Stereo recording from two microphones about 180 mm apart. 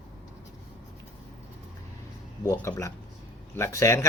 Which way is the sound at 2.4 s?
15° left (ahead or behind).